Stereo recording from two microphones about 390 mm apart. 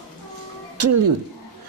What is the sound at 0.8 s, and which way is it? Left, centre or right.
Speech, right.